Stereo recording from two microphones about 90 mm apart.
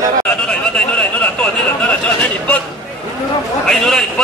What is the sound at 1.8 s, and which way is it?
Speech, 15° left (ahead or behind).